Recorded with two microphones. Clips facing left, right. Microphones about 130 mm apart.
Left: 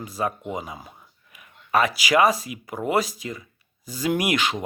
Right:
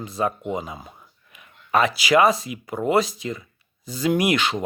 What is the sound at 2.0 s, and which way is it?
Speech, 35° right (ahead or behind).